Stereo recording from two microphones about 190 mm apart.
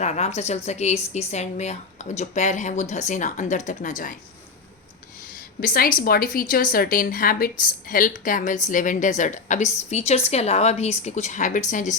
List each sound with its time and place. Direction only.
0.0 s a woman's voice: 35° left (ahead or behind)
5.5 s a woman's voice: 50° left (ahead or behind)